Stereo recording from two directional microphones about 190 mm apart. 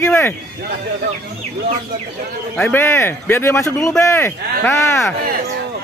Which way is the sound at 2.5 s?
10° left (ahead or behind).